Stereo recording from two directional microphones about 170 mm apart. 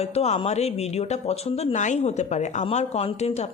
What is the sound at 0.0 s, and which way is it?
Speech, 40° left (ahead or behind).